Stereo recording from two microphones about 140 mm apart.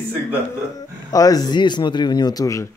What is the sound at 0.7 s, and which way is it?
Speech, 25° left (ahead or behind).